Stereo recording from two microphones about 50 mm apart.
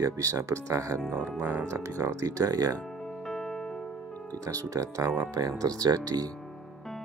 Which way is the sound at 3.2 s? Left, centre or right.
Centre.